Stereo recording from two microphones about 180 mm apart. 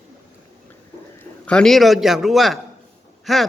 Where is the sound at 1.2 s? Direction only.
5° left (ahead or behind).